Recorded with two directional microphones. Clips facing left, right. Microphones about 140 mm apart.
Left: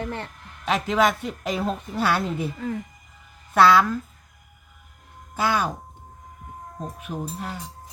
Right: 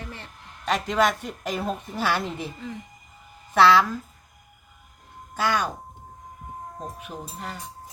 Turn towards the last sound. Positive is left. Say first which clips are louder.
# left 4 dB
turn(degrees=5)  # may be behind; listen again after turning